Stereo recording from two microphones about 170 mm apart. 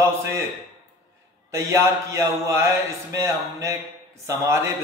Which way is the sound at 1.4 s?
15° right (ahead or behind).